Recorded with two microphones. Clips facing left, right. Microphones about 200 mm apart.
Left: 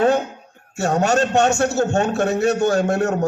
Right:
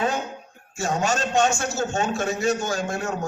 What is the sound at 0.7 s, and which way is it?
A man's voice, 65° left (ahead or behind).